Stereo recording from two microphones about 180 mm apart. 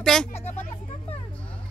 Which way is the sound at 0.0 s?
5° left (ahead or behind).